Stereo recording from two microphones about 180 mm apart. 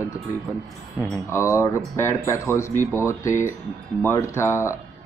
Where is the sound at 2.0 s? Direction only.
15° left (ahead or behind).